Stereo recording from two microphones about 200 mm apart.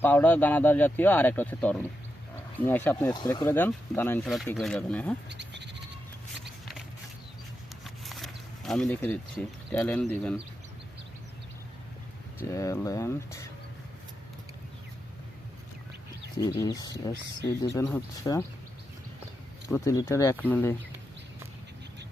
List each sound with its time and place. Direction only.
0.0 s speech: 10° left (ahead or behind)
5.3 s speech: 60° right (ahead or behind)
7.9 s a sound: centre (ahead or behind)
9.7 s speech: 10° left (ahead or behind)
12.4 s speech: 15° left (ahead or behind)
16.6 s speech: 20° left (ahead or behind)
19.6 s speech: 15° left (ahead or behind)